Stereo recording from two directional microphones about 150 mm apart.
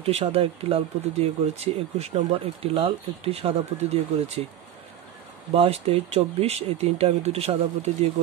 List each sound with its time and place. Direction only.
0.0 s speech: 45° right (ahead or behind)
5.5 s speech: 40° right (ahead or behind)